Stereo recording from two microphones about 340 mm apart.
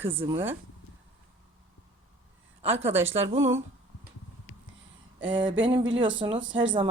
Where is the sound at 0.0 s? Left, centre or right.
Centre.